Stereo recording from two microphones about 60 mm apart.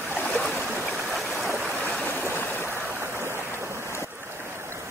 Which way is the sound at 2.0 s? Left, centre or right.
Left.